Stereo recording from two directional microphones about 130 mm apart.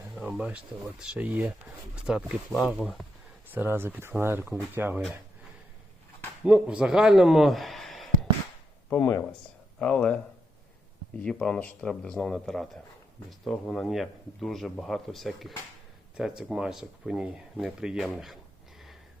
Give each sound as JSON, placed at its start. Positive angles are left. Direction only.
{"t": 0.2, "sound": "speech", "side_deg": -5}
{"t": 3.5, "sound": "speech", "side_deg": -15}
{"t": 6.4, "sound": "speech", "side_deg": -10}
{"t": 8.9, "sound": "speech", "side_deg": 10}
{"t": 11.2, "sound": "speech", "side_deg": 5}